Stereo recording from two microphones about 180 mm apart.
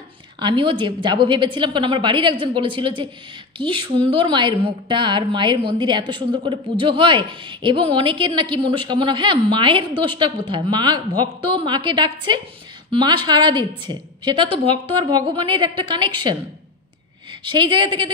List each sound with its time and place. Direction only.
0.4 s a woman's voice: 25° right (ahead or behind)